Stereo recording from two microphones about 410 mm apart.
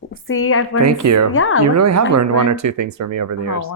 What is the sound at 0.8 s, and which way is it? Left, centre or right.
Speech, right.